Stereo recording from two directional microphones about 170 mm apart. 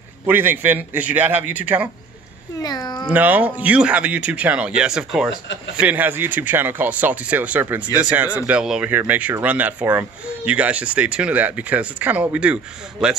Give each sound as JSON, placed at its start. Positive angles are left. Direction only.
{"t": 0.3, "sound": "speech", "side_deg": -10}
{"t": 2.6, "sound": "speech", "side_deg": 25}
{"t": 3.1, "sound": "a man's voice", "side_deg": -10}